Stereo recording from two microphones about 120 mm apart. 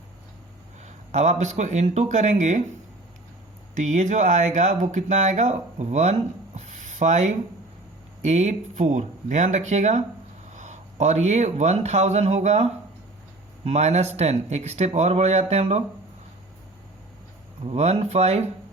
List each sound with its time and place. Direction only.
0.9 s speech: 70° right (ahead or behind); by 2.6 s 85° right
3.8 s speech: 85° right
6.6 s a sound: 90° right
8.2 s speech: 70° right (ahead or behind)
10.5 s speech: 85° right; by 15.8 s 65° right (ahead or behind)
17.6 s speech: 55° right (ahead or behind)